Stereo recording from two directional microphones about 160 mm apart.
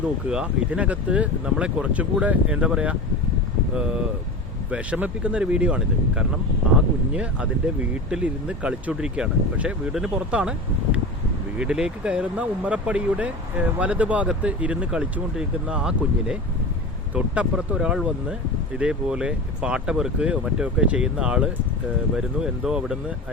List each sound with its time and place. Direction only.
0.3 s speech: 5° right (ahead or behind)
4.7 s speech: 10° right (ahead or behind)
11.6 s speech: 5° right (ahead or behind)